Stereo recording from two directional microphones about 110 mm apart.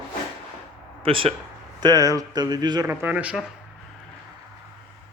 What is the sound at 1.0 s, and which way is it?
Speech, 55° right (ahead or behind).